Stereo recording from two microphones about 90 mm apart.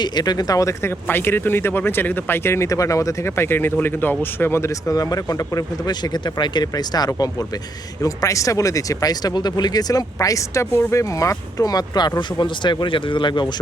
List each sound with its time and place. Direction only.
0.0 s speech: 50° left (ahead or behind); by 4.9 s 30° left (ahead or behind)
4.9 s speech: 45° left (ahead or behind); by 13.5 s 60° left (ahead or behind)